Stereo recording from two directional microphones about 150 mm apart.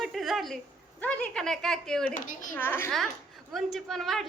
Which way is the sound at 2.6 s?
15° left (ahead or behind).